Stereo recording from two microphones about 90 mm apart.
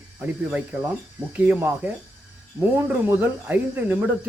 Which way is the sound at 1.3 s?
15° right (ahead or behind).